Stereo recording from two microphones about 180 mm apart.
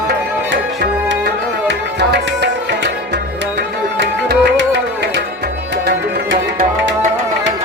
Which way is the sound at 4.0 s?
70° right (ahead or behind).